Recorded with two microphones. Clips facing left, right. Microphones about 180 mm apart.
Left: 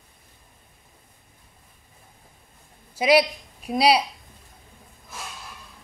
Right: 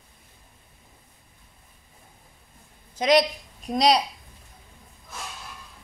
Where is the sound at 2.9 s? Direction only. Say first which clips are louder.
Left 1 dB; 10° left (ahead or behind).